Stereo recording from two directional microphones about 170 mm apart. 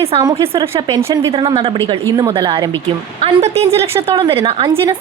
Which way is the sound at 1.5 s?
35° right (ahead or behind).